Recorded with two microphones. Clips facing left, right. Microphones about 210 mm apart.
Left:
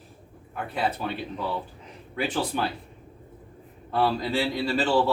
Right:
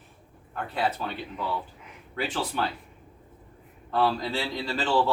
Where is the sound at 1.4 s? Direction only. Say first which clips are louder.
Left 1 dB; 35° left (ahead or behind).